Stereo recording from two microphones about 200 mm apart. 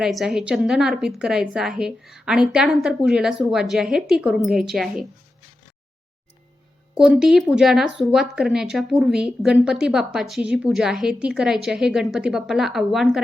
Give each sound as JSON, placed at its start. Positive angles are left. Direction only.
{"t": 0.0, "sound": "speech", "side_deg": 0}
{"t": 6.9, "sound": "speech", "side_deg": -5}